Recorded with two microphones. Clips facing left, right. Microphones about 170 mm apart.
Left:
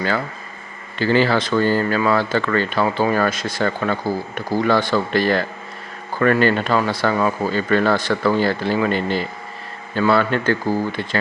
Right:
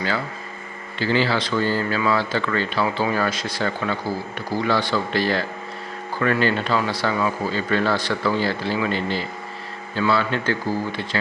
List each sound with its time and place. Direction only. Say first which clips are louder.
0.9 s speech: left 4 dB; 50° left (ahead or behind)